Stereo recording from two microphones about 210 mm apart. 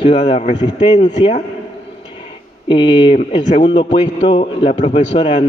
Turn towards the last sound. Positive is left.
turn(degrees=25)  # may be behind; listen again after turning